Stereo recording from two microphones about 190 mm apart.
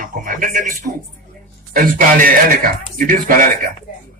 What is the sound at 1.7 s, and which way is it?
Speech, 45° right (ahead or behind).